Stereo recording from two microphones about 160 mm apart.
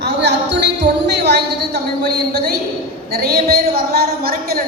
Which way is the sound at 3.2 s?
75° right (ahead or behind).